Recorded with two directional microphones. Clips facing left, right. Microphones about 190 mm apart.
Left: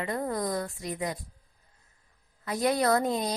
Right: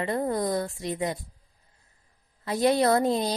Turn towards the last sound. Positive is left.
turn(degrees=-30)  # may be behind; listen again after turning